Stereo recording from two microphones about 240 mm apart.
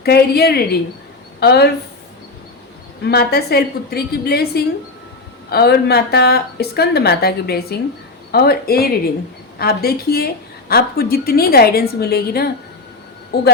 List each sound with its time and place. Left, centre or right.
0.0 s speech: left
3.0 s speech: left